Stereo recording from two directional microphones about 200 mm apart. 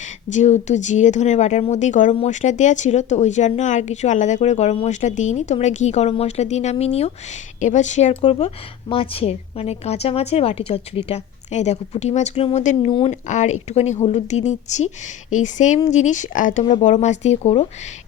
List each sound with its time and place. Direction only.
0.0 s speech: 35° left (ahead or behind)